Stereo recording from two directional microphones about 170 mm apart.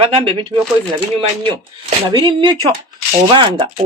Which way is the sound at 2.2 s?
30° right (ahead or behind).